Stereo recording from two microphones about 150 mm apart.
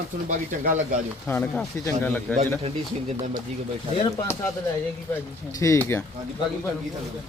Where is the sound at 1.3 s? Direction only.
10° left (ahead or behind).